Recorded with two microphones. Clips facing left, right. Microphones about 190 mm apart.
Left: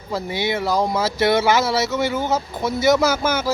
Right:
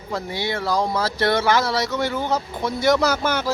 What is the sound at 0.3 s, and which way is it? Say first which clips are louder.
Speech: left 2 dB; 20° left (ahead or behind).